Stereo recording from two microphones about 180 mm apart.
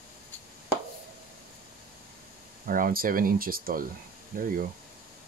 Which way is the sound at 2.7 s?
50° right (ahead or behind).